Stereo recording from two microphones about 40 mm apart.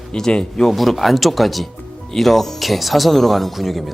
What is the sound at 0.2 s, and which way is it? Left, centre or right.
Speech, centre.